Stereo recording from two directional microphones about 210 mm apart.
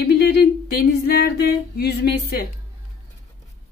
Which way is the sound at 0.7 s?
45° left (ahead or behind).